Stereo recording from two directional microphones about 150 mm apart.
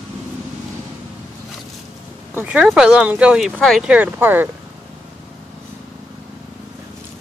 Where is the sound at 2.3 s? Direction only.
10° right (ahead or behind).